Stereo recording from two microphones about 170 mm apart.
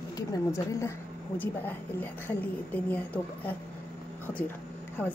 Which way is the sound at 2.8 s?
10° left (ahead or behind).